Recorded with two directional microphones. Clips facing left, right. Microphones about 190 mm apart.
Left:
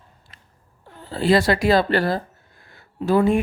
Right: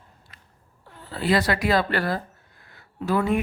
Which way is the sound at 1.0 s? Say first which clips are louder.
Left 5 dB; 30° left (ahead or behind).